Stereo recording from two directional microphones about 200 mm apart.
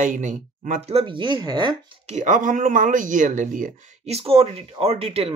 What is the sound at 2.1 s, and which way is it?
Speech, 40° right (ahead or behind).